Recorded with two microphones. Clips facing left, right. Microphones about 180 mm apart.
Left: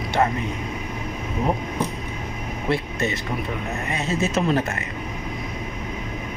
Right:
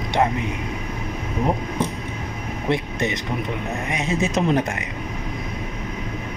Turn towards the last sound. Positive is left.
turn(degrees=-15)  # may be behind; listen again after turning